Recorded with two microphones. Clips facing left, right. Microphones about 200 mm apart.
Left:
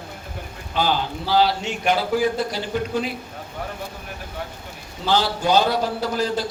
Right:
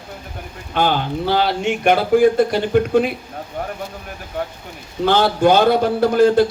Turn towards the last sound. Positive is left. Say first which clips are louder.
# right 10 dB
turn(degrees=-55)  # may be behind; listen again after turning